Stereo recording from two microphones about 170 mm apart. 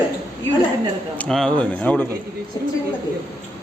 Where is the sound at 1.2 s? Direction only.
5° left (ahead or behind).